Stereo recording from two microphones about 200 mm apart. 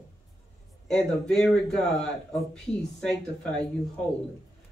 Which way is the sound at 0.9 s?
5° left (ahead or behind).